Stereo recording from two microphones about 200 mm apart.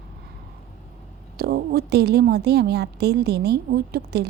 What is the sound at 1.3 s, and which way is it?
A woman's voice, 50° right (ahead or behind).